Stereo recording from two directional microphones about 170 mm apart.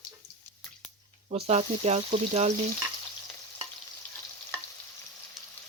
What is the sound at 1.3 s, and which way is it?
Speech, 35° right (ahead or behind).